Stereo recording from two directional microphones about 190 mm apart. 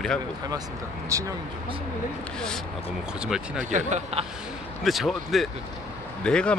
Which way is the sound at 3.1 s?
5° right (ahead or behind).